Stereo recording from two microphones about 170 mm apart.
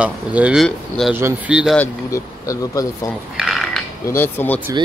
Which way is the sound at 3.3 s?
Centre (ahead or behind).